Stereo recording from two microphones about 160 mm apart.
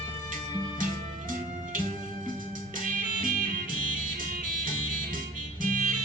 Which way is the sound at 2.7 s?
55° right (ahead or behind).